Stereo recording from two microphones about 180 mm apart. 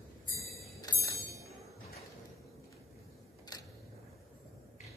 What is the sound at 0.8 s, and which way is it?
Bell, 20° left (ahead or behind).